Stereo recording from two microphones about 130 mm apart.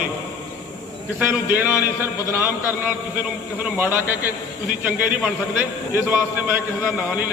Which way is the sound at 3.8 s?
15° right (ahead or behind).